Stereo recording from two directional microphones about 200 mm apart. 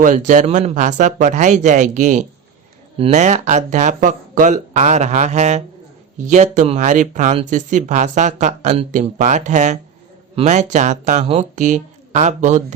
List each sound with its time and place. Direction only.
0.0 s speech: 40° right (ahead or behind)